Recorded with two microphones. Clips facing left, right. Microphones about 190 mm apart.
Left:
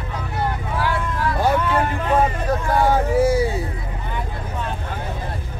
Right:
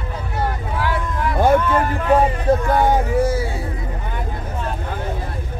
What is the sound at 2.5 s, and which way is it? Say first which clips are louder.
Hubbub: right 6 dB; 25° right (ahead or behind).